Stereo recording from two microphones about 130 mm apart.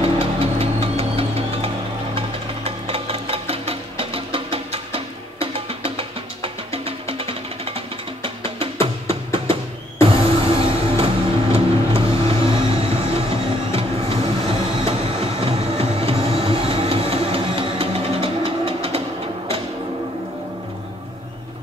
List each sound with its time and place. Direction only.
0.0 s music: 45° right (ahead or behind)
11.5 s vehicle: 45° right (ahead or behind)
14.9 s train: 45° right (ahead or behind)